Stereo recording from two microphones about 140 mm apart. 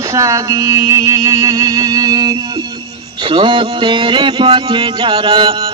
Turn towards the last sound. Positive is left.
turn(degrees=-40)  # may be behind; listen again after turning